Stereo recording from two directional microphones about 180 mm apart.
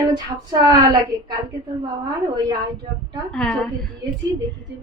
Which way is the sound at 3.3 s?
5° left (ahead or behind).